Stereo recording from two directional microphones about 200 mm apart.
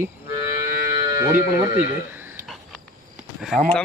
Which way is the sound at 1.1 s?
15° right (ahead or behind).